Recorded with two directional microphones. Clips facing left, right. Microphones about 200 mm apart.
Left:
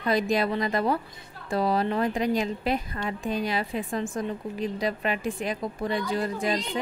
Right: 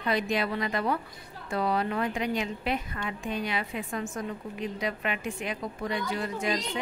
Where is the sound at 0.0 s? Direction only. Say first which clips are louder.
Left 4 dB; 40° left (ahead or behind).